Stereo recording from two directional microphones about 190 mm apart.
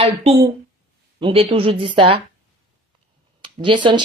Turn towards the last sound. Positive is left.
turn(degrees=-25)  # may be behind; listen again after turning